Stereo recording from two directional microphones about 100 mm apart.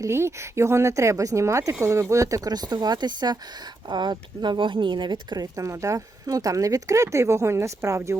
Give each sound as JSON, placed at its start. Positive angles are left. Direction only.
{"t": 0.0, "sound": "speech", "side_deg": -25}
{"t": 5.5, "sound": "speech", "side_deg": -30}